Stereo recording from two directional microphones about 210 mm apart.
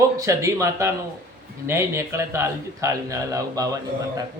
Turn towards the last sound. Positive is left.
turn(degrees=-15)  # may be behind; listen again after turning